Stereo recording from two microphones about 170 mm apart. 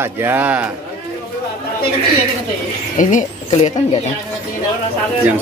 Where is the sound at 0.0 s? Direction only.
15° right (ahead or behind).